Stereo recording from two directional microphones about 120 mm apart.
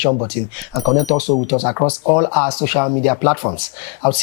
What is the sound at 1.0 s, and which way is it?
Speech, 30° left (ahead or behind).